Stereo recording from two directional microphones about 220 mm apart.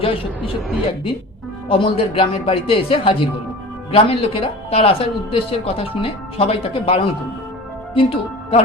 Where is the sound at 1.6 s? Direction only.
25° left (ahead or behind).